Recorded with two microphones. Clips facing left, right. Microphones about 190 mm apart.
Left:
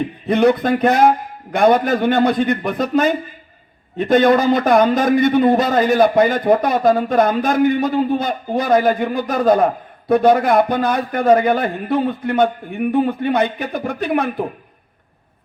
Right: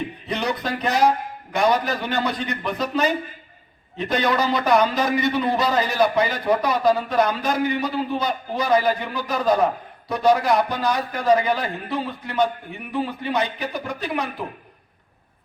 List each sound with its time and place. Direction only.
0.3 s a man's voice: 55° left (ahead or behind)